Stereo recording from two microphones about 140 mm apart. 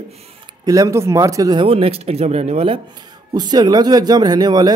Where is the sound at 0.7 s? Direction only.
25° right (ahead or behind); by 2.8 s 45° right (ahead or behind).